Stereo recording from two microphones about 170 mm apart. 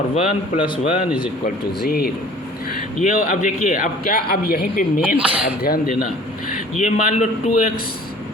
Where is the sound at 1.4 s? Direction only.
65° left (ahead or behind).